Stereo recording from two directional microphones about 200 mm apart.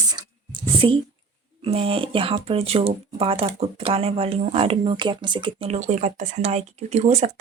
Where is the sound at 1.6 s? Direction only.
30° right (ahead or behind).